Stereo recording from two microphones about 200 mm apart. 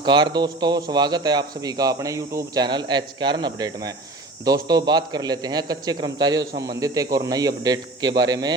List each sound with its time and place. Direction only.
0.0 s speech: 25° right (ahead or behind)